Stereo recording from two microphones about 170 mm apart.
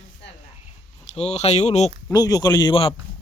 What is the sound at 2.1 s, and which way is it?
Speech, 25° left (ahead or behind).